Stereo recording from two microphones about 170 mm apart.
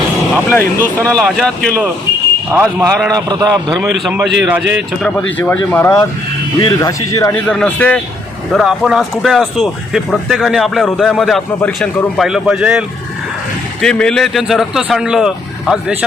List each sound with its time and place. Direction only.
0.5 s speech: 10° left (ahead or behind)
2.5 s a man's voice: 10° right (ahead or behind)
3.2 s a man's voice: 25° right (ahead or behind)
3.7 s a man's voice: centre (ahead or behind)
5.4 s speech: 15° left (ahead or behind)
6.6 s a man's voice: 25° left (ahead or behind)
7.4 s speech: 5° left (ahead or behind)
13.8 s speech: 5° left (ahead or behind)